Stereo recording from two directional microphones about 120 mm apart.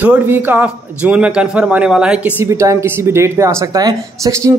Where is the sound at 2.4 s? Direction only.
25° right (ahead or behind).